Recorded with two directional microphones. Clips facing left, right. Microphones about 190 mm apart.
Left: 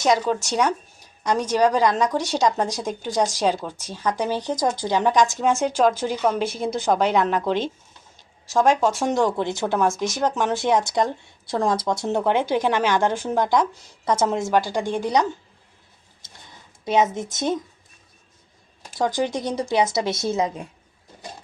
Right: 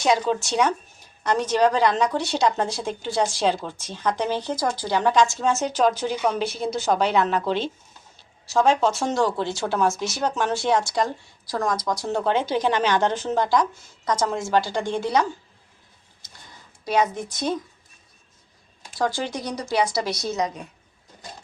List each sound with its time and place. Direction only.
0.4 s speech: 10° left (ahead or behind)
16.8 s a woman's voice: 20° left (ahead or behind)
18.9 s a woman's voice: 15° left (ahead or behind)